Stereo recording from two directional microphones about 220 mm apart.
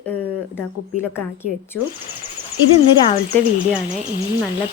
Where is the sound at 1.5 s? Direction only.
40° right (ahead or behind).